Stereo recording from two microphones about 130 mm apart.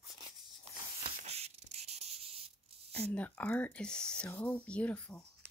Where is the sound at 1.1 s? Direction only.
55° right (ahead or behind).